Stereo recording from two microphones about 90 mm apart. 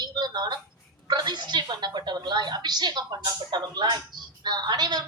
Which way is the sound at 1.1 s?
55° right (ahead or behind).